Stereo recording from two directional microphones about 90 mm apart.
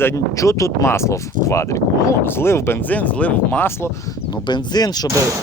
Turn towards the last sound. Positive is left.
turn(degrees=45)  # may be behind; listen again after turning